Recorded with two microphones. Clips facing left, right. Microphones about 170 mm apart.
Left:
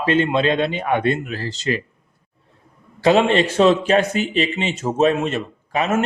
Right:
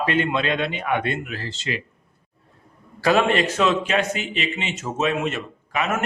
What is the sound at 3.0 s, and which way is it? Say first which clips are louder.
Speech: left 4 dB; 25° left (ahead or behind).